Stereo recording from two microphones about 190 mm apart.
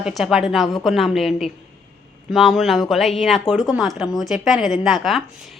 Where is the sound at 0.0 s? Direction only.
Centre (ahead or behind).